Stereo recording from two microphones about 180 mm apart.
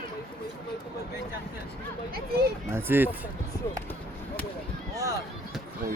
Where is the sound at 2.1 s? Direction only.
60° right (ahead or behind).